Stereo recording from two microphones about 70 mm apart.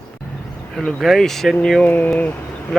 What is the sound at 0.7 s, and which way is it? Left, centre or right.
Speech, centre.